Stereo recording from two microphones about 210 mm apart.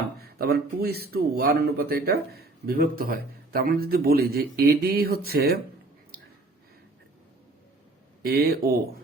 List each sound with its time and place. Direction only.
0.2 s speech: 45° right (ahead or behind)
8.2 s speech: 45° right (ahead or behind)